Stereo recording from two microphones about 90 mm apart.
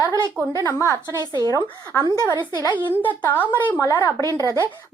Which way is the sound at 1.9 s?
25° left (ahead or behind).